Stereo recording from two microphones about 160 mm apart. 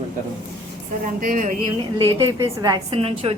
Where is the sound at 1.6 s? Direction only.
35° right (ahead or behind).